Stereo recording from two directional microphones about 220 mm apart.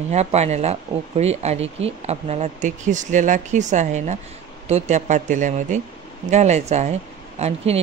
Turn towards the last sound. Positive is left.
turn(degrees=-30)  # may be behind; listen again after turning